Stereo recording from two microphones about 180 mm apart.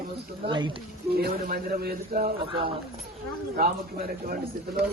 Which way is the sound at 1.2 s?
55° right (ahead or behind).